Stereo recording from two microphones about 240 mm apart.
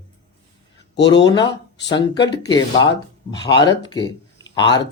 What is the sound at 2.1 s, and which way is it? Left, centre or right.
Speech, centre.